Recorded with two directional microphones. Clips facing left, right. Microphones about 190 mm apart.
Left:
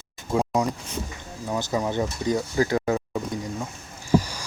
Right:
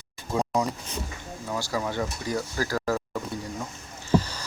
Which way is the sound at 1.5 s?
20° left (ahead or behind).